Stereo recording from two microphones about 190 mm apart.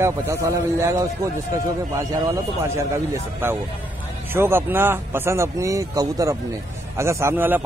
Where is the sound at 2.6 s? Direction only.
15° right (ahead or behind).